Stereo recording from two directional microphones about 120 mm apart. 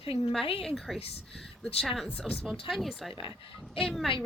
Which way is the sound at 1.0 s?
55° left (ahead or behind).